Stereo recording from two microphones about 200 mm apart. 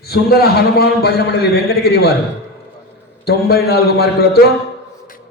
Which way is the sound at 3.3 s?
50° left (ahead or behind).